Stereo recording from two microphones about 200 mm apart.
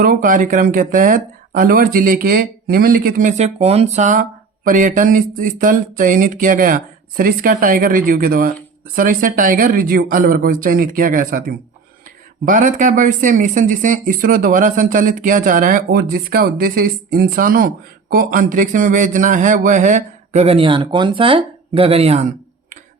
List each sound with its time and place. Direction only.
0.0 s speech: 40° right (ahead or behind)